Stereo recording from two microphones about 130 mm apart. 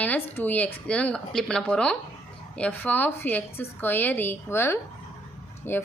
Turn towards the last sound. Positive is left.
turn(degrees=15)  # may be behind; listen again after turning